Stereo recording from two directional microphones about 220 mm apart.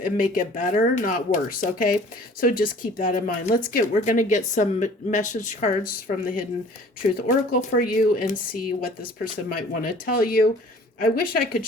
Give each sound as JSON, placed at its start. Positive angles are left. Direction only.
{"t": 0.0, "sound": "speech", "side_deg": 35}
{"t": 9.5, "sound": "speech", "side_deg": 40}